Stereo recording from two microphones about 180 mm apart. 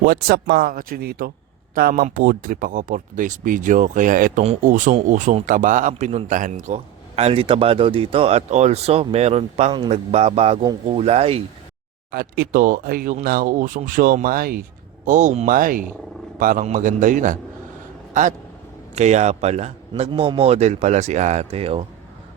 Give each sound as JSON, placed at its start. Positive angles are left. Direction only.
{"t": 0.0, "sound": "speech", "side_deg": -55}
{"t": 5.9, "sound": "a man's voice", "side_deg": -35}
{"t": 12.1, "sound": "speech", "side_deg": -55}
{"t": 15.0, "sound": "a man's voice", "side_deg": -45}